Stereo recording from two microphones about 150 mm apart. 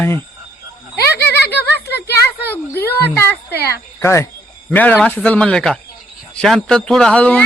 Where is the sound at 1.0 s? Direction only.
90° left.